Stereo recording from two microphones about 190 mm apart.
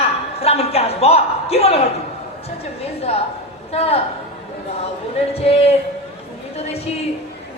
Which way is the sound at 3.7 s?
30° left (ahead or behind).